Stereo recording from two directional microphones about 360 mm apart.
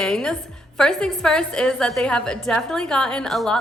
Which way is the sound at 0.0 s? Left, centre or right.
Centre.